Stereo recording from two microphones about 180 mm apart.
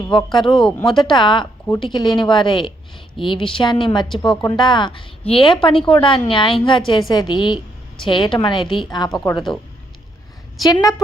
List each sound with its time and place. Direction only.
0.1 s a woman's voice: 25° left (ahead or behind)
0.5 s speech: 5° left (ahead or behind)
1.2 s a woman's voice: 25° left (ahead or behind)
4.1 s speech: centre (ahead or behind)
4.4 s a woman's voice: 20° left (ahead or behind)
9.5 s speech: centre (ahead or behind)